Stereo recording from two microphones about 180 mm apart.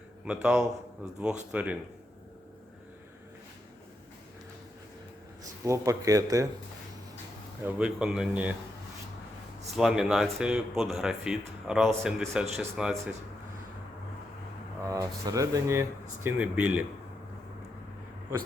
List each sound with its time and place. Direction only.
0.4 s speech: 5° right (ahead or behind)
5.6 s speech: 15° right (ahead or behind)
7.6 s speech: 10° right (ahead or behind)
9.7 s speech: 5° right (ahead or behind)
14.8 s speech: 20° right (ahead or behind)